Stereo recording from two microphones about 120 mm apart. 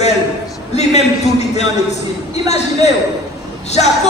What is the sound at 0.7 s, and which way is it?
A man's voice, 65° left (ahead or behind).